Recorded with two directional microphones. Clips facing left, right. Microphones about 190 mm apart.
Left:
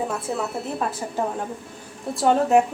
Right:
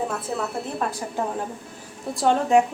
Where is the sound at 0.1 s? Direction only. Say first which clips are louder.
Left 1 dB; centre (ahead or behind).